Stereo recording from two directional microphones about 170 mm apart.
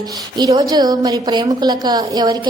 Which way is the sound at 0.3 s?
20° right (ahead or behind).